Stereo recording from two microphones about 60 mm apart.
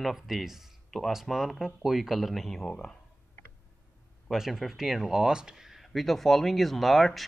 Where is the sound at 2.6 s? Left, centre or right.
Centre.